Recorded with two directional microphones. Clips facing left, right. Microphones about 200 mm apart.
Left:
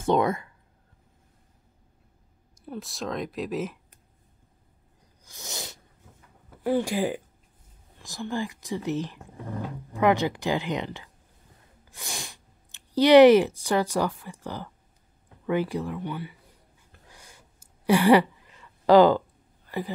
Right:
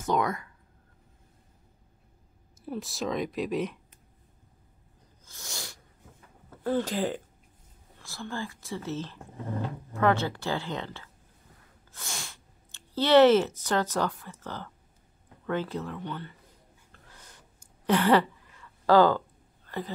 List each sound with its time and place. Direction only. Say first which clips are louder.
0.0 s speech: left 5 dB; 25° left (ahead or behind)
2.5 s speech: right 2 dB; centre (ahead or behind)
5.2 s sneeze: left 4 dB; 20° left (ahead or behind)
6.6 s speech: left 3 dB; 10° left (ahead or behind)
16.9 s a sound: left 2 dB; 10° left (ahead or behind)